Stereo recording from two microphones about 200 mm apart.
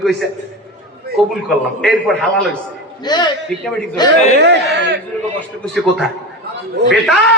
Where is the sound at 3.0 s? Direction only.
20° left (ahead or behind).